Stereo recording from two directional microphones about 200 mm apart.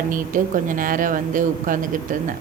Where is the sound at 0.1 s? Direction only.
40° right (ahead or behind).